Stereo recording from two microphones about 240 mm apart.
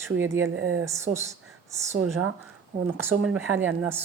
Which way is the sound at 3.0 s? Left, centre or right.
Centre.